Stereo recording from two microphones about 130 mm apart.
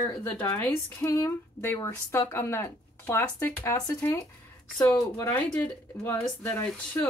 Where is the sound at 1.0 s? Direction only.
25° left (ahead or behind).